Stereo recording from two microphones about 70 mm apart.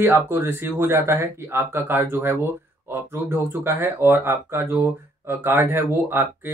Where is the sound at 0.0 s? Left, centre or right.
Right.